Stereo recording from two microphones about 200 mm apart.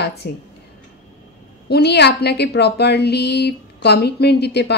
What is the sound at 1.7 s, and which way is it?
A woman's voice, 55° left (ahead or behind).